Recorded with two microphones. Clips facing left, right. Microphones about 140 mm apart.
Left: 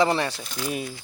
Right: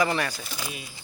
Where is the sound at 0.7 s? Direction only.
50° left (ahead or behind).